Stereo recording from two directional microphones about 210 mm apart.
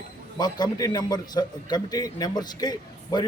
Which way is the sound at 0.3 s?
20° left (ahead or behind).